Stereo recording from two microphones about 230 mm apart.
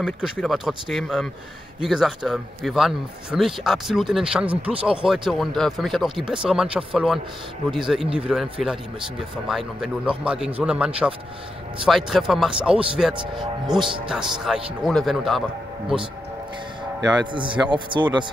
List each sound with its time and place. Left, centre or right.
0.0 s a man's voice: centre
13.1 s speech: right
14.0 s a man's voice: centre
17.3 s speech: right